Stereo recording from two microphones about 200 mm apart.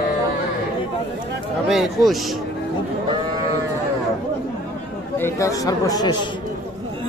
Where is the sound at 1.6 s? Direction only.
Centre (ahead or behind).